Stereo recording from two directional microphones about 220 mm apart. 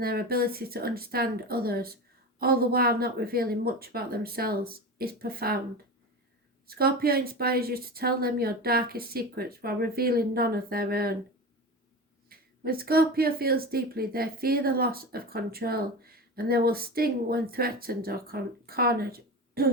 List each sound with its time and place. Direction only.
0.0 s speech: 45° right (ahead or behind)
12.3 s speech: 45° right (ahead or behind)